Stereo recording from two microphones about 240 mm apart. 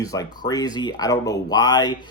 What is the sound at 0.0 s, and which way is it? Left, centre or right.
Speech, centre.